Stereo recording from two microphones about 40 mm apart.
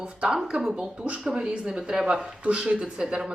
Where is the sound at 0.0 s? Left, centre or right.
Right.